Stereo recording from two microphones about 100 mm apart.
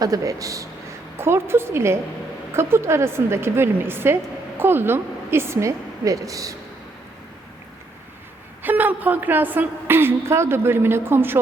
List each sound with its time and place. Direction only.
0.0 s a woman's voice: 35° right (ahead or behind)
8.6 s a woman's voice: 15° right (ahead or behind)